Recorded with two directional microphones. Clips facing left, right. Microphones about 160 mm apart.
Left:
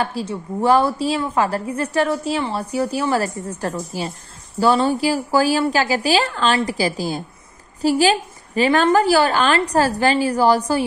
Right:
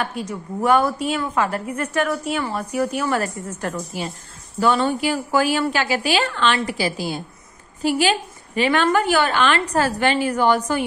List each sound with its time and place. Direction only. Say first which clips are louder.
0.0 s a woman's voice: left 3 dB; 30° left (ahead or behind)